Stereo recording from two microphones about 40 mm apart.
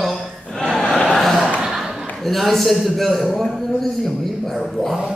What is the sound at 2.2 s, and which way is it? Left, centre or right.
A man's voice, centre.